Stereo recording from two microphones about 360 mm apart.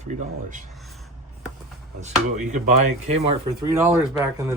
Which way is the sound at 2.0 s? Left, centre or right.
Centre.